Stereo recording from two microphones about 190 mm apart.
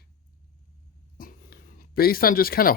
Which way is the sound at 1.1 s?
50° left (ahead or behind).